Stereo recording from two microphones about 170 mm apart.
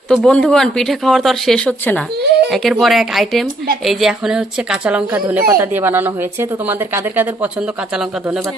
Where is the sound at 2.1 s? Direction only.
70° right (ahead or behind).